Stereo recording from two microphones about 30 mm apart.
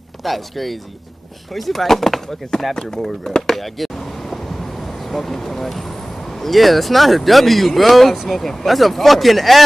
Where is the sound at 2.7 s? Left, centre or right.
Left.